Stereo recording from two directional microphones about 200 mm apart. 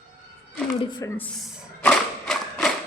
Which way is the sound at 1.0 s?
15° left (ahead or behind).